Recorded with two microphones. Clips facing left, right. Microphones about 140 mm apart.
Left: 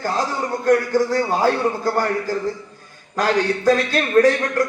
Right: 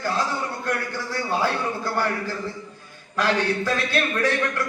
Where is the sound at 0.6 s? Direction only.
40° left (ahead or behind).